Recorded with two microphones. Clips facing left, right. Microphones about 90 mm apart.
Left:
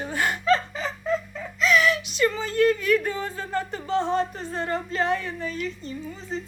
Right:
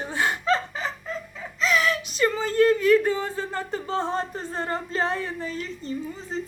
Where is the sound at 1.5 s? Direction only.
30° right (ahead or behind).